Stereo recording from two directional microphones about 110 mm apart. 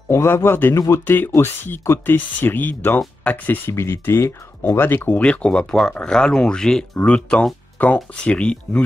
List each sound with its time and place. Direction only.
0.1 s speech: 20° left (ahead or behind)
1.0 s speech: 20° left (ahead or behind)